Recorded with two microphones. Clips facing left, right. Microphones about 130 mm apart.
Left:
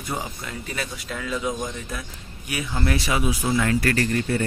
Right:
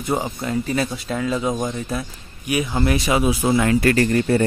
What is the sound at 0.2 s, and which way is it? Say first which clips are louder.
Speech: right 10 dB; 35° right (ahead or behind).